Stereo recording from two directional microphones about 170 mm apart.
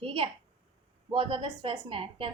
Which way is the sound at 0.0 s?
30° right (ahead or behind).